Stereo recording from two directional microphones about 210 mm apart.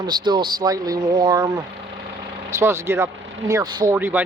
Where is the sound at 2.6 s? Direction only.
10° right (ahead or behind).